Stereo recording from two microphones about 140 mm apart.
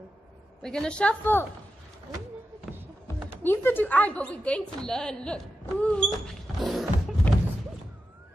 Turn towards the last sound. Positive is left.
turn(degrees=10)  # may be behind; listen again after turning